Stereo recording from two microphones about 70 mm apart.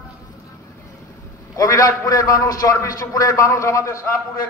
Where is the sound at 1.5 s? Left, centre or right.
Left.